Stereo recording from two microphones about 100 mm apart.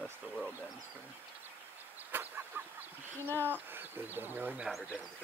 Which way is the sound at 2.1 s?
20° right (ahead or behind).